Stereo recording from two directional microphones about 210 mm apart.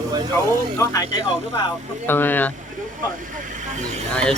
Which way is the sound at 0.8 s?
15° left (ahead or behind).